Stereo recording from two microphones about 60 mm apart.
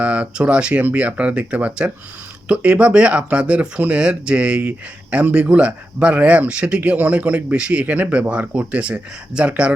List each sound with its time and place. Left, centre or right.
0.0 s speech: right